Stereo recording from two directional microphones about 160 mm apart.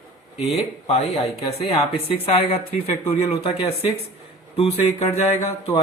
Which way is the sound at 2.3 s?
35° left (ahead or behind).